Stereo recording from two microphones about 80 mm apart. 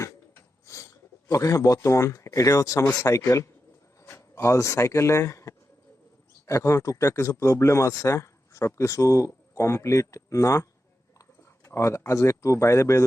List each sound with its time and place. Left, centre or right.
1.3 s speech: left